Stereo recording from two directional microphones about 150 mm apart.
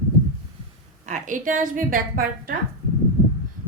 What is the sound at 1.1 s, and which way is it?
A woman's voice, 60° right (ahead or behind).